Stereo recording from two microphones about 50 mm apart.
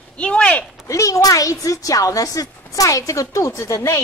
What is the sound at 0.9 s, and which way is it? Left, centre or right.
A child's voice, left.